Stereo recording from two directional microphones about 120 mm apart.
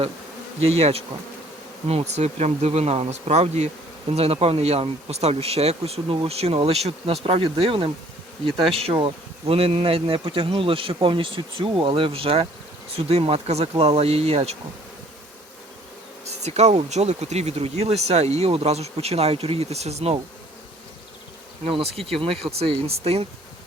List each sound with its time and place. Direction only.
0.6 s speech: 60° right (ahead or behind)
7.3 s bee: 50° right (ahead or behind)
13.1 s speech: 55° right (ahead or behind)
16.2 s speech: 65° right (ahead or behind)
21.6 s bee: 55° right (ahead or behind)
22.2 s speech: 55° right (ahead or behind)